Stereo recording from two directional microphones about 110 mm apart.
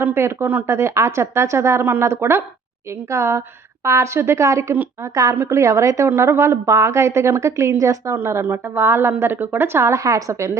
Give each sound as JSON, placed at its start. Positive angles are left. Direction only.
{"t": 0.0, "sound": "a woman's voice", "side_deg": -20}